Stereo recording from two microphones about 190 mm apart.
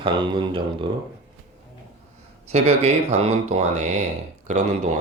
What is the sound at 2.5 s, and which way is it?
Speech, 35° right (ahead or behind).